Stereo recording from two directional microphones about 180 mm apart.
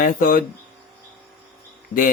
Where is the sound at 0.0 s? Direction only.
55° left (ahead or behind).